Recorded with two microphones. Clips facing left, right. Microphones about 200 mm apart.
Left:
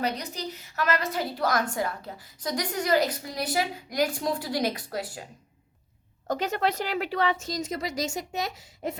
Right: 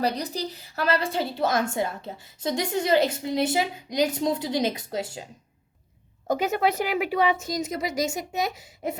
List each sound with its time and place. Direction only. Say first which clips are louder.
0.0 s a woman's voice: right 4 dB; 35° right (ahead or behind)
6.2 s a woman's voice: right 3 dB; 10° right (ahead or behind)